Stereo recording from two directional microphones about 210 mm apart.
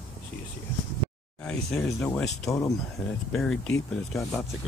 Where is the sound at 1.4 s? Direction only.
5° left (ahead or behind).